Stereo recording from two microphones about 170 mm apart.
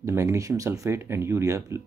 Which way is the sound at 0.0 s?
20° right (ahead or behind).